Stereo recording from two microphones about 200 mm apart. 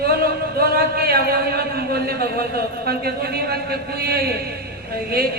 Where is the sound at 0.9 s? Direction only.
50° right (ahead or behind).